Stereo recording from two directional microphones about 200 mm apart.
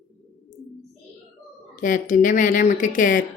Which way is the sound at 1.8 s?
40° left (ahead or behind).